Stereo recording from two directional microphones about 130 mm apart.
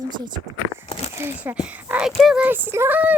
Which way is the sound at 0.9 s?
50° left (ahead or behind).